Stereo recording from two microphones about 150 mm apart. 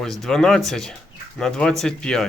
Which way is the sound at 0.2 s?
Centre (ahead or behind).